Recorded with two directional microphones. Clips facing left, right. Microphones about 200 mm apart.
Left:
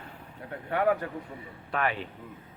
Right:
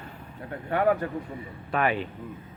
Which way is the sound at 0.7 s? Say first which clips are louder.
Right 2 dB; 40° right (ahead or behind).